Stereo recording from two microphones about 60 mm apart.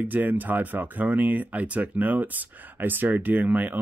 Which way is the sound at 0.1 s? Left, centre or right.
Right.